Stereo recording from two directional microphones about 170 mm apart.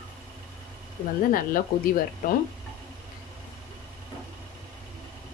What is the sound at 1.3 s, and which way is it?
A woman's voice, 55° left (ahead or behind).